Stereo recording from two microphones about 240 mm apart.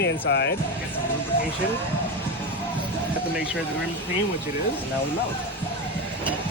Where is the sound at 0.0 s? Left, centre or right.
Left.